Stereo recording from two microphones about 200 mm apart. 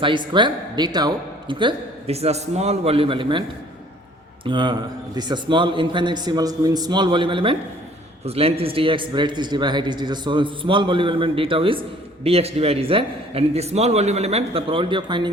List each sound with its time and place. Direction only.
0.0 s a man's voice: 25° right (ahead or behind)
4.4 s a man's voice: 25° right (ahead or behind)